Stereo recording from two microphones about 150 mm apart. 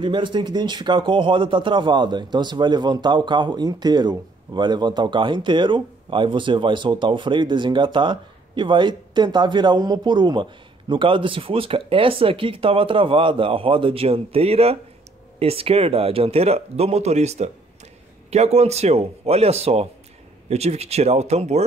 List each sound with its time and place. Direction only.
0.0 s a man's voice: 30° right (ahead or behind)